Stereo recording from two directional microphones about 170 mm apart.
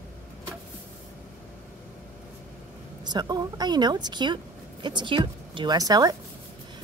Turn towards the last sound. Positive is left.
turn(degrees=-20)  # may be behind; listen again after turning